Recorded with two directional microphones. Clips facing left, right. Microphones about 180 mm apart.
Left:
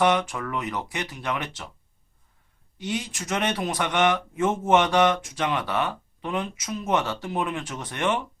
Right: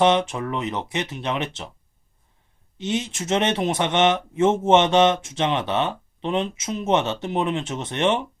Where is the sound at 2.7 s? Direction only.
25° right (ahead or behind).